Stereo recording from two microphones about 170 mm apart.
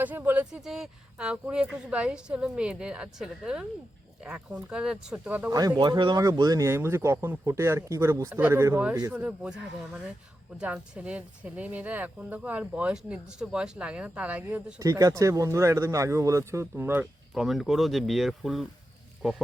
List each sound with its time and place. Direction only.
0.0 s speech: 10° right (ahead or behind)
5.5 s speech: 20° right (ahead or behind); by 19.4 s 5° right (ahead or behind)